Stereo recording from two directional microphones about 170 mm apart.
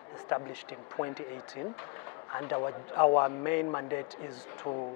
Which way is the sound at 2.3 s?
25° left (ahead or behind).